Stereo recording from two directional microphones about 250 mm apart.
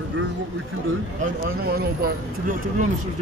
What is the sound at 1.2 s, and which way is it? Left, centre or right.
Speech, right.